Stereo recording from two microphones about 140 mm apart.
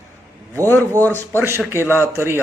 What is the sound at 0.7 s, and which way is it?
Speech, 15° left (ahead or behind).